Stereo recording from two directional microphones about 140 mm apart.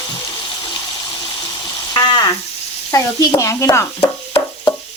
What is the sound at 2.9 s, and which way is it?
Speech, 25° left (ahead or behind).